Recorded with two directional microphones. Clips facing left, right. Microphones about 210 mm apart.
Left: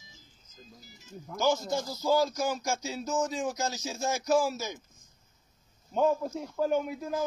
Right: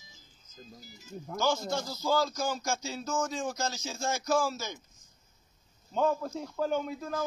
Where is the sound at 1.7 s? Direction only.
15° left (ahead or behind).